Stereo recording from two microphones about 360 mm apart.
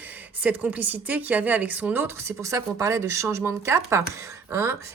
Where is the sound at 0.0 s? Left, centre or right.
Centre.